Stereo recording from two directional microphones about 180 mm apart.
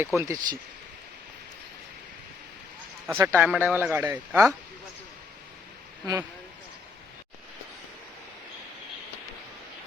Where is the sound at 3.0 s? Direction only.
15° right (ahead or behind).